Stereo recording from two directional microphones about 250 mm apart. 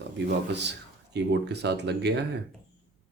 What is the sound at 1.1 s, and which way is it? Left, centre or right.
Speech, right.